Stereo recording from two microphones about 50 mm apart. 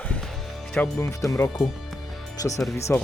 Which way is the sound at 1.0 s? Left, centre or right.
Left.